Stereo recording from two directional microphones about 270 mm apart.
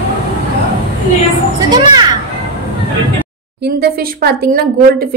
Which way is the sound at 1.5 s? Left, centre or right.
Centre.